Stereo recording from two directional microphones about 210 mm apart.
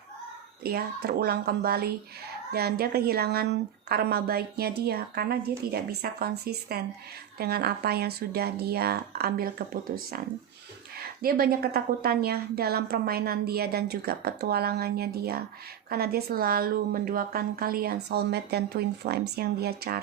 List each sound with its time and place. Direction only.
0.6 s speech: 50° right (ahead or behind)